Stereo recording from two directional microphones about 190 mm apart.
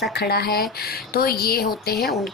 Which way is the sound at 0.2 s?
55° left (ahead or behind).